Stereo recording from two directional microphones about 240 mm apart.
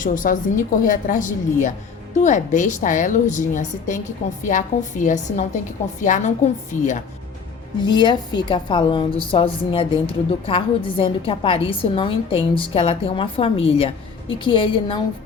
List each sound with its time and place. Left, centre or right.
0.0 s a woman's voice: left
7.8 s a woman's voice: centre